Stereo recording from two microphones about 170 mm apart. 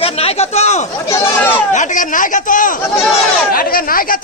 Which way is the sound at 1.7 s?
45° left (ahead or behind).